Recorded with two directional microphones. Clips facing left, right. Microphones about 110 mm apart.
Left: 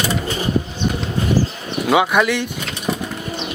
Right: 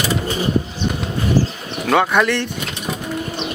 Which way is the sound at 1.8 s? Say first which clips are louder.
Even; 5° left (ahead or behind).